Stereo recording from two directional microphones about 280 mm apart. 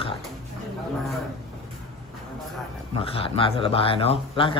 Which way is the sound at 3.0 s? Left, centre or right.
Centre.